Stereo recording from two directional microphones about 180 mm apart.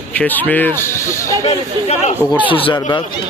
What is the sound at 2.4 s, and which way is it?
Speech, 30° left (ahead or behind).